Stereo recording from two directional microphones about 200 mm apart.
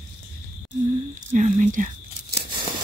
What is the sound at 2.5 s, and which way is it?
Tearing, 25° right (ahead or behind).